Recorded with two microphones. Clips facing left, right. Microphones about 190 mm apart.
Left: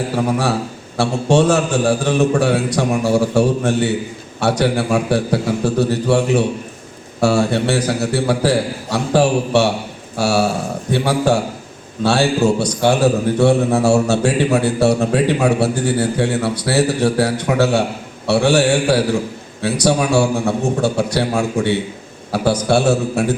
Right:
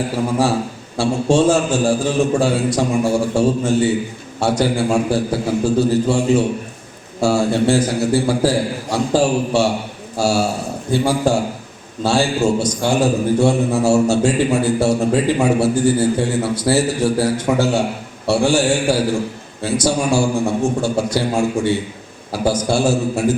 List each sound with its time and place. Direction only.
0.2 s a man's voice: 65° left (ahead or behind)